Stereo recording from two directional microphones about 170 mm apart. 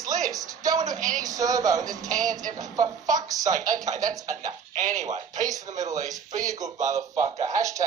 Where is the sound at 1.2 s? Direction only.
20° right (ahead or behind).